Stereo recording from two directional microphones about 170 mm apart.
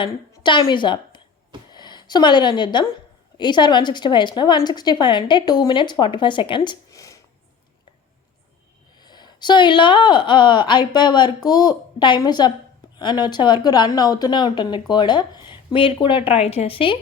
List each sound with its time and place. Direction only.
0.0 s a woman's voice: 25° left (ahead or behind)
9.0 s a woman's voice: 25° left (ahead or behind)